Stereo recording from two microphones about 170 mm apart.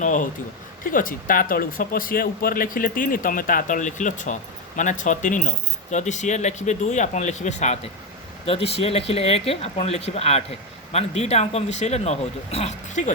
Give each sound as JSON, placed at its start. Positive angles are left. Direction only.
{"t": 0.0, "sound": "a man's voice", "side_deg": 50}